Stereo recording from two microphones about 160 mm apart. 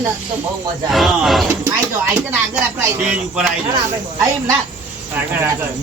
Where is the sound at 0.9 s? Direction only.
Centre (ahead or behind).